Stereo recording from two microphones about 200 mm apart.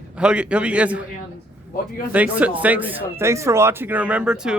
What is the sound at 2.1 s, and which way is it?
Speech, 5° right (ahead or behind).